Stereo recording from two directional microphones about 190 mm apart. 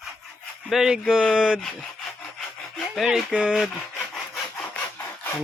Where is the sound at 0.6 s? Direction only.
Centre (ahead or behind).